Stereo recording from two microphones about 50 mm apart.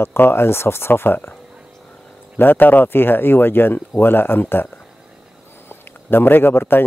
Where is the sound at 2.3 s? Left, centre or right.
Left.